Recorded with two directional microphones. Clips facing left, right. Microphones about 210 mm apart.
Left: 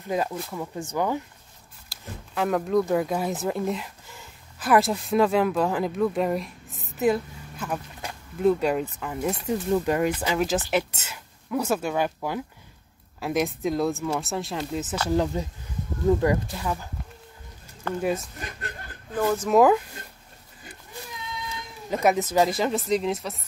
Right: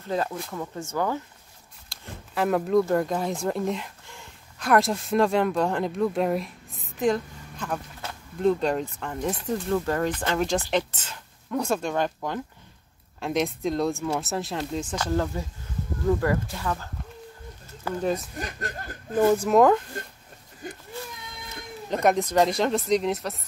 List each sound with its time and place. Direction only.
0.0 s speech: 15° left (ahead or behind)
0.8 s speech: 15° left (ahead or behind)
1.9 s speech: centre (ahead or behind)
7.0 s a sound: 5° left (ahead or behind)
9.0 s speech: 5° left (ahead or behind)
17.9 s speech: 10° right (ahead or behind)
19.1 s speech: 10° right (ahead or behind)
19.5 s speech: 5° left (ahead or behind)
21.9 s speech: 5° left (ahead or behind)